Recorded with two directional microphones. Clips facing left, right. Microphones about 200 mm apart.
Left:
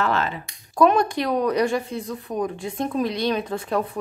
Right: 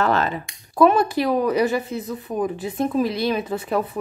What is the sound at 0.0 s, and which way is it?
Speech, 40° right (ahead or behind).